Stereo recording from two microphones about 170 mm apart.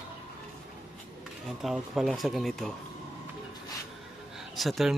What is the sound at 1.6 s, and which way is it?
Speech, centre (ahead or behind).